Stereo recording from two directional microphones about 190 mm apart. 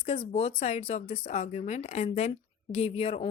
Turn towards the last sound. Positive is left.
turn(degrees=30)  # may be behind; listen again after turning